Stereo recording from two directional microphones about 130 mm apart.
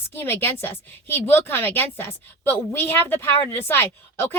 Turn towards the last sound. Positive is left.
turn(degrees=15)  # may be behind; listen again after turning